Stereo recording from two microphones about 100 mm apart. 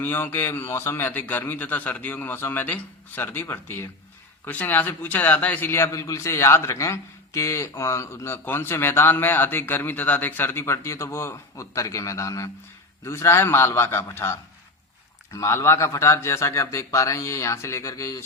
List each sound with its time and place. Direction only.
0.0 s a man's voice: 20° left (ahead or behind)